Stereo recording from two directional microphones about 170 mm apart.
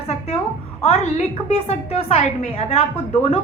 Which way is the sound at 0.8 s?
40° left (ahead or behind).